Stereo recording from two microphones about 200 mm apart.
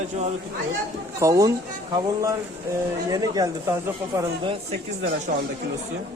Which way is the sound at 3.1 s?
20° right (ahead or behind).